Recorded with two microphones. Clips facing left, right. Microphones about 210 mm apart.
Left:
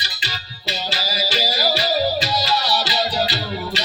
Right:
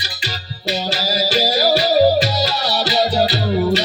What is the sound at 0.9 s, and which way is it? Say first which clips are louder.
Music: right 5 dB; 40° right (ahead or behind).